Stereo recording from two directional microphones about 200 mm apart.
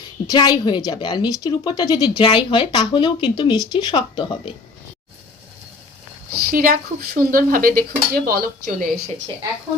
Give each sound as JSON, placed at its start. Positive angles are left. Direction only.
{"t": 0.3, "sound": "a woman's voice", "side_deg": 20}
{"t": 6.5, "sound": "speech", "side_deg": -40}